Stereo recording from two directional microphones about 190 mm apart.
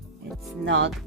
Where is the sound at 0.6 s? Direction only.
70° right (ahead or behind).